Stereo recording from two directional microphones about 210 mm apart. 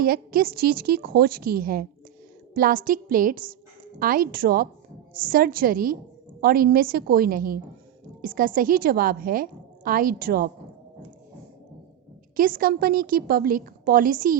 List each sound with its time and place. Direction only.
0.0 s a woman's voice: 45° right (ahead or behind)
12.4 s a woman's voice: 45° right (ahead or behind)